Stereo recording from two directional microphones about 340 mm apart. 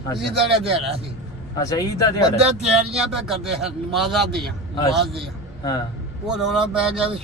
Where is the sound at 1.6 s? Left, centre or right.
Centre.